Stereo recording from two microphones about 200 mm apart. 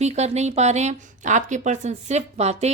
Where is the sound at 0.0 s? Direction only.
35° right (ahead or behind).